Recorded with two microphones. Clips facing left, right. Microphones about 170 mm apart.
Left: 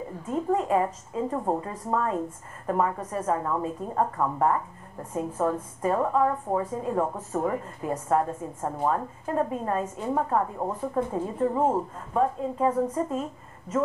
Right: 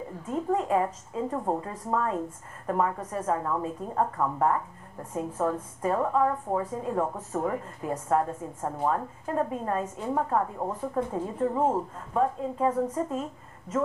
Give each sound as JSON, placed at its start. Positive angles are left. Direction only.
{"t": 0.3, "sound": "a woman's voice", "side_deg": 20}